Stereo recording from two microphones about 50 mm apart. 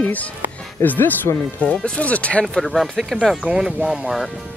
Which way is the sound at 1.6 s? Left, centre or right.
Left.